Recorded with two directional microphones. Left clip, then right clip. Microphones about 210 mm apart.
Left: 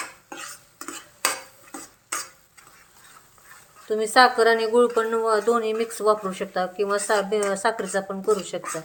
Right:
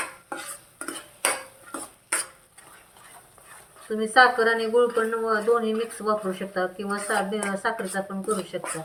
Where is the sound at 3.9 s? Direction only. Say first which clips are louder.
Left 1 dB; 55° left (ahead or behind).